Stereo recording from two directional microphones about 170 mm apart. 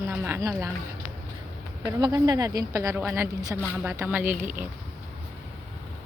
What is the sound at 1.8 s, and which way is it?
A woman's voice, 25° right (ahead or behind).